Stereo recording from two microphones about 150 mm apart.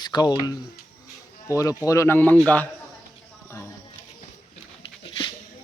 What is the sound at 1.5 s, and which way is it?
Speech, 20° left (ahead or behind).